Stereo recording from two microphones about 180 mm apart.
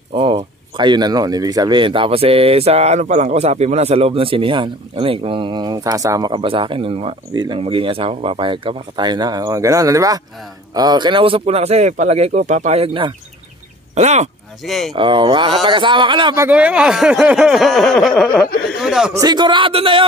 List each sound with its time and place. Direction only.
0.1 s speech: 30° right (ahead or behind)
14.6 s speech: centre (ahead or behind)
15.0 s speech: 25° right (ahead or behind)
16.3 s speech: 10° right (ahead or behind)
18.8 s a sound: 5° right (ahead or behind)
19.1 s speech: 25° right (ahead or behind)